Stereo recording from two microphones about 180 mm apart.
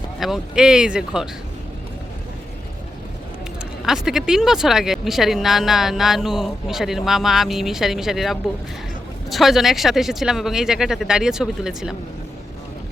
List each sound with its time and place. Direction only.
0.2 s speech: centre (ahead or behind)
3.8 s speech: centre (ahead or behind)